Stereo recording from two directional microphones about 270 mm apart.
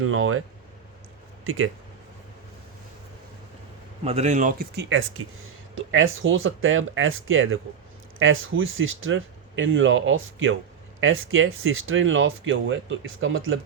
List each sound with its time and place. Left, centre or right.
0.1 s speech: right
1.5 s speech: right
4.0 s speech: right